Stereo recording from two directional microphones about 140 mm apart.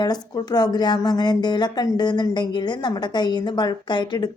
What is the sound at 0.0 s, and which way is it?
Speech, 30° left (ahead or behind).